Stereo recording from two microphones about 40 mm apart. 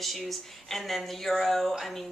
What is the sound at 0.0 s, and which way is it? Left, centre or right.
Speech, centre.